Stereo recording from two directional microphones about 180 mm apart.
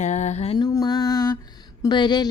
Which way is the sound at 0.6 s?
20° left (ahead or behind).